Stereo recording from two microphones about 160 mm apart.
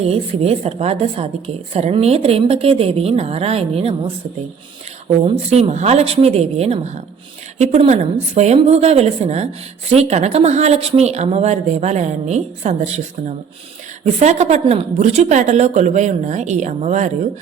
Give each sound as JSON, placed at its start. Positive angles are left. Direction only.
{"t": 0.0, "sound": "a woman's voice", "side_deg": -40}